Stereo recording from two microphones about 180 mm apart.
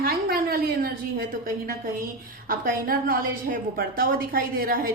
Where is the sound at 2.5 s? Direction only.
50° right (ahead or behind).